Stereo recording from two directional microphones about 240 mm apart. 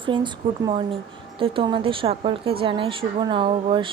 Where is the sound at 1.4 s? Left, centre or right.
Right.